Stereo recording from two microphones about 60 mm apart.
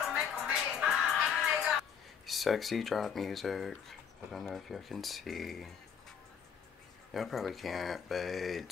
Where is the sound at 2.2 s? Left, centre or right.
Centre.